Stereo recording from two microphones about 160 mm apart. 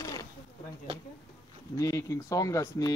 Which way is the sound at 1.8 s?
20° left (ahead or behind).